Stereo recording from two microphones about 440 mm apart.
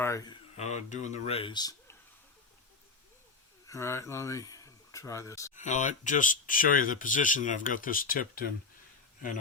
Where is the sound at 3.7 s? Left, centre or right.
Centre.